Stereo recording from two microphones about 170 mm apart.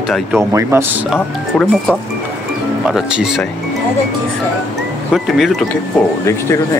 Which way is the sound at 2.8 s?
5° right (ahead or behind).